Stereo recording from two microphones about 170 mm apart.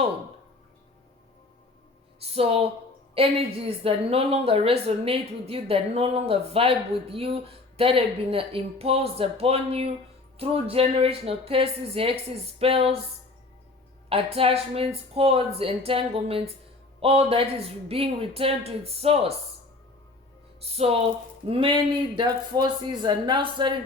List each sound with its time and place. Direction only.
2.3 s speech: 35° right (ahead or behind)
3.8 s speech: 35° right (ahead or behind)
14.1 s speech: 35° right (ahead or behind)
20.6 s speech: 35° right (ahead or behind)